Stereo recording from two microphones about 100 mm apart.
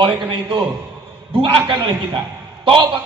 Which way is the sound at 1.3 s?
60° right (ahead or behind).